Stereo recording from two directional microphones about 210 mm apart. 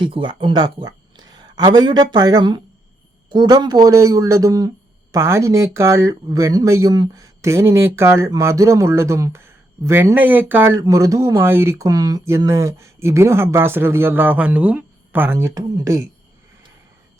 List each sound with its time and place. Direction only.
0.0 s speech: 25° right (ahead or behind)